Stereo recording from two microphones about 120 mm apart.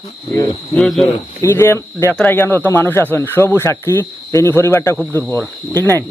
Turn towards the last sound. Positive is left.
turn(degrees=20)  # may be behind; listen again after turning